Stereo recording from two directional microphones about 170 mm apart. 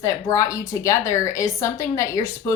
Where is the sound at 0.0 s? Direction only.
20° left (ahead or behind).